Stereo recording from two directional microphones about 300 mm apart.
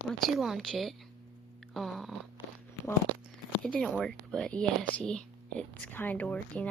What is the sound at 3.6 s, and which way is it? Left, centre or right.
Speech, centre.